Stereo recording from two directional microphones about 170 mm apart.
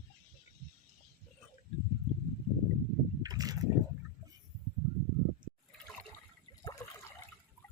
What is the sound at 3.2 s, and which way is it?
Boat, 20° right (ahead or behind).